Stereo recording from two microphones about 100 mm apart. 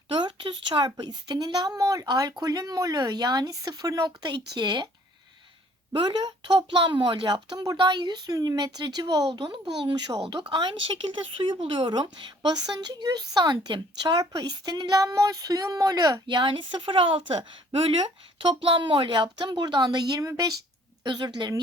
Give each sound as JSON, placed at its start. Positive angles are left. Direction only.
{"t": 0.1, "sound": "a woman's voice", "side_deg": -55}
{"t": 5.9, "sound": "a woman's voice", "side_deg": -55}
{"t": 11.6, "sound": "speech", "side_deg": -75}
{"t": 11.9, "sound": "a woman's voice", "side_deg": -50}
{"t": 16.2, "sound": "a woman's voice", "side_deg": -55}